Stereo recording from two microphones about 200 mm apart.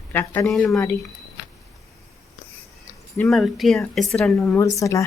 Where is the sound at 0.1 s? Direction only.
10° left (ahead or behind).